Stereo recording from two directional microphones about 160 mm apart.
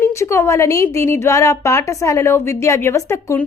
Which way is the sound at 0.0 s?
20° left (ahead or behind).